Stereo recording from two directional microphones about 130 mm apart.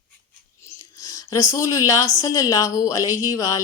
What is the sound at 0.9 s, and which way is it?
Speech, 25° left (ahead or behind).